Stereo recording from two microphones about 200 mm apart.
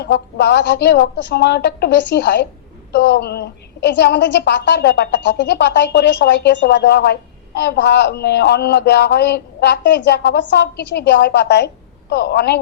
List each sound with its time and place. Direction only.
0.0 s a woman's voice: 55° left (ahead or behind)